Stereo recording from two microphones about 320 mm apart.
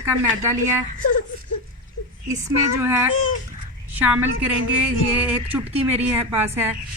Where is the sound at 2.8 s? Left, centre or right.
Centre.